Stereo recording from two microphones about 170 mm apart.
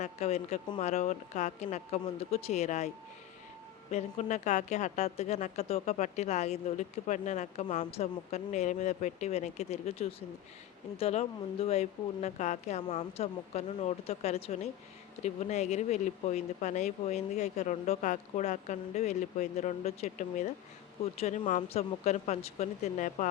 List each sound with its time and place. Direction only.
0.0 s a woman's voice: 40° left (ahead or behind)
3.9 s a woman's voice: 45° left (ahead or behind)